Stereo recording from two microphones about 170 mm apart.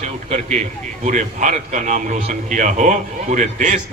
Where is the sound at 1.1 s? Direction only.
45° right (ahead or behind).